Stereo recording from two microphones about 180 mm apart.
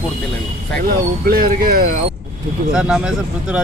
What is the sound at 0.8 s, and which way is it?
Speech, 55° right (ahead or behind).